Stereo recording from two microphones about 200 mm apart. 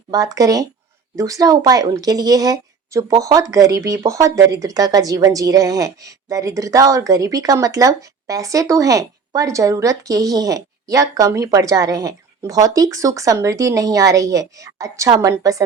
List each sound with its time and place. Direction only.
0.1 s a woman's voice: 20° right (ahead or behind)